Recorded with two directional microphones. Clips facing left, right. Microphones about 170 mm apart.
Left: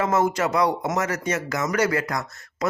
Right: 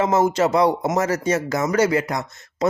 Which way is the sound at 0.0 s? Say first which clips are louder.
Right 4 dB; 25° right (ahead or behind).